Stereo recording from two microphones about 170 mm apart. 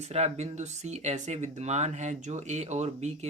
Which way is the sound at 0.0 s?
40° right (ahead or behind).